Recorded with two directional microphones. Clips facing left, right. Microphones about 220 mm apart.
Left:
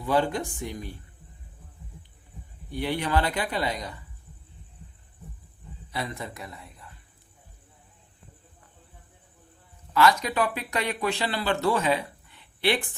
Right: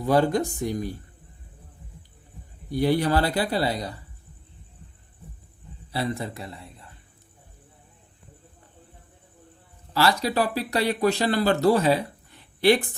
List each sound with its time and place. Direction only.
0.0 s speech: 40° right (ahead or behind)
2.6 s speech: 40° right (ahead or behind)
5.9 s a man's voice: 30° right (ahead or behind)
9.9 s speech: 35° right (ahead or behind)